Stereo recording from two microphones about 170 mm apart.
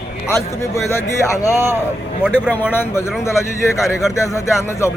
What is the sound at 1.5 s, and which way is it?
Speech, 15° right (ahead or behind).